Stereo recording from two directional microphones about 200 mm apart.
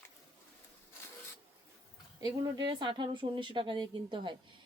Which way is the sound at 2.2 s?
20° right (ahead or behind).